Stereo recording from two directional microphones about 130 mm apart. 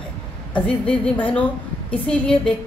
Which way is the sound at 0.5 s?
10° left (ahead or behind).